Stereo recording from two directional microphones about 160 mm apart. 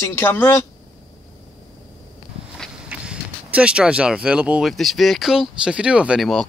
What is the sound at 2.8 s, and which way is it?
Speech, 5° right (ahead or behind).